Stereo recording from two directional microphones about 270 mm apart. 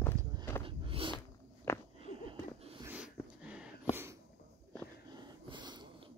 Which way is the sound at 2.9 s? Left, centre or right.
Centre.